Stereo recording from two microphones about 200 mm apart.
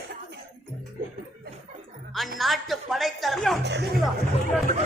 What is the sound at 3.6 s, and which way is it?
Speech, 55° right (ahead or behind).